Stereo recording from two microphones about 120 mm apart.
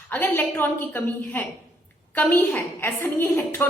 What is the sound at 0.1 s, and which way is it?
A woman's voice, 15° left (ahead or behind).